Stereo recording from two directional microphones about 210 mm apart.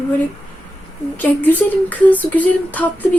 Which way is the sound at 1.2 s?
10° left (ahead or behind).